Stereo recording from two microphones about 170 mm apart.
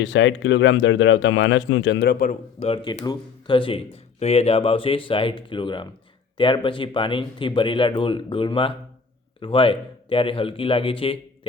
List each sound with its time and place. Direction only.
0.0 s speech: 90° left; by 2.3 s 60° left (ahead or behind)
2.6 s speech: 35° left (ahead or behind)